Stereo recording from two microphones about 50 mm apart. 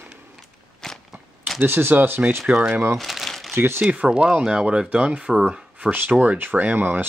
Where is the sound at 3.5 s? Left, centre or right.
Right.